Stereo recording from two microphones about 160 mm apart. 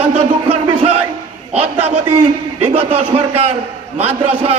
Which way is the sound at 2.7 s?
35° right (ahead or behind).